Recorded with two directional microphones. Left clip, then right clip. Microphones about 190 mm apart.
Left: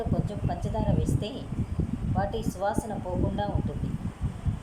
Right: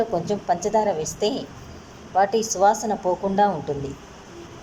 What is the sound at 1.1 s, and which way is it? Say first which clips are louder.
A woman's voice: right 11 dB; 20° right (ahead or behind).